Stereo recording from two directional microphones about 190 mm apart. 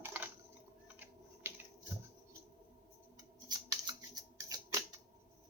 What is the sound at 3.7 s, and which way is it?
Scissors, 20° right (ahead or behind).